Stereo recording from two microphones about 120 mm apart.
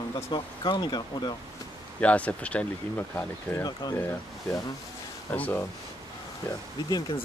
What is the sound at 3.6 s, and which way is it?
Speech, 35° left (ahead or behind).